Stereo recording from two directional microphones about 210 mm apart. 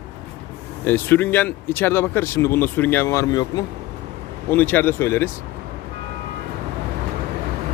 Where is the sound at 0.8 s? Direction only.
10° left (ahead or behind).